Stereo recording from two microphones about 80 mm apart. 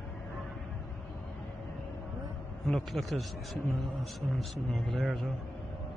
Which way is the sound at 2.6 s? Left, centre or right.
Centre.